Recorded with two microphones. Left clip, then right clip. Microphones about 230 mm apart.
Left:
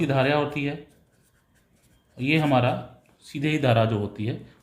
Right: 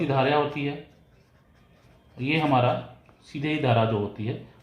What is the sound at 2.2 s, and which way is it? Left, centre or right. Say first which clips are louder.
Speech: left 1 dB; left.